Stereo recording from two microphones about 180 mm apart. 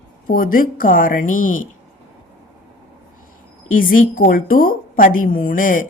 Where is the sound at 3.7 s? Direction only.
50° left (ahead or behind).